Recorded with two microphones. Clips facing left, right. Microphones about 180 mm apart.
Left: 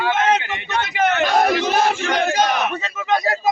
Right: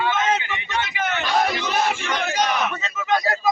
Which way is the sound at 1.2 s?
45° left (ahead or behind).